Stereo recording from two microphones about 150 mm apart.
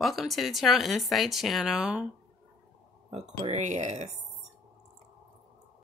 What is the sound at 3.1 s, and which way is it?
Speech, 45° right (ahead or behind).